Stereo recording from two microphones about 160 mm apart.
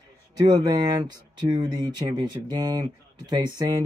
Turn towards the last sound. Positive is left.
turn(degrees=-25)  # may be behind; listen again after turning